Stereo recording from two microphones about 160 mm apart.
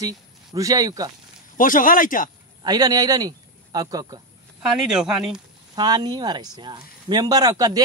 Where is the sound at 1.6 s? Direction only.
55° left (ahead or behind).